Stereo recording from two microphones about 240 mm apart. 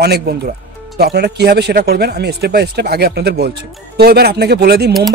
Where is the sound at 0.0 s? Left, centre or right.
Right.